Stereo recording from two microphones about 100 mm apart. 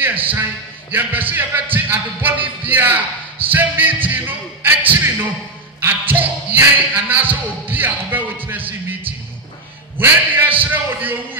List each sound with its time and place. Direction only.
0.0 s a sound: 20° right (ahead or behind)
0.9 s music: 20° right (ahead or behind)
10.6 s a man's voice: 20° right (ahead or behind)